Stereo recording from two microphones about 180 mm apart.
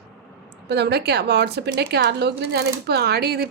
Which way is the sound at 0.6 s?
65° right (ahead or behind).